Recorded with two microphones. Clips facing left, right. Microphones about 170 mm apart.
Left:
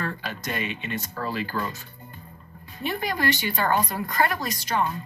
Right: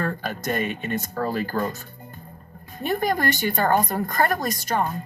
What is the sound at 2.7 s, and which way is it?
Speech, 45° right (ahead or behind).